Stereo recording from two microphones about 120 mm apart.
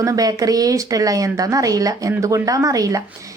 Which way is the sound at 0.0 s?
30° right (ahead or behind).